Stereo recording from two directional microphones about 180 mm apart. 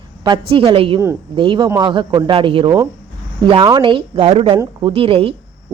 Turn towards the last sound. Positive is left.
turn(degrees=-30)  # may be behind; listen again after turning